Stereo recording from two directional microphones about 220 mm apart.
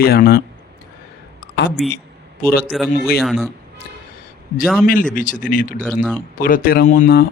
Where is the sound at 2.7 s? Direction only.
5° right (ahead or behind).